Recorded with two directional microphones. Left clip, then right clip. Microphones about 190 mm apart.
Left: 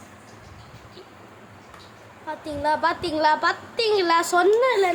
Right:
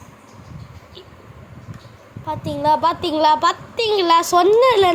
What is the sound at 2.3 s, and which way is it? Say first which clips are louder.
A woman's voice: right 6 dB; 15° right (ahead or behind).